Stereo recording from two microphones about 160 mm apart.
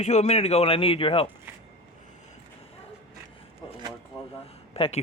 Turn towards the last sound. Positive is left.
turn(degrees=35)  # may be behind; listen again after turning